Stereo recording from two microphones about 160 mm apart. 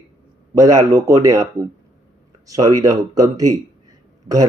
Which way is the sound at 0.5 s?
20° right (ahead or behind).